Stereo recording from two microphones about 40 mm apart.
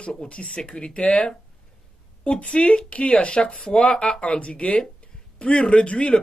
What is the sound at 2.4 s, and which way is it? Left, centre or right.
Speech, left.